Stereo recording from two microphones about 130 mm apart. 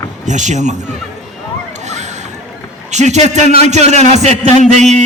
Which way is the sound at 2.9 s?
60° right (ahead or behind).